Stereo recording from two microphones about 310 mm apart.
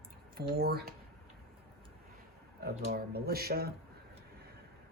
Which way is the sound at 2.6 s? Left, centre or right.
Right.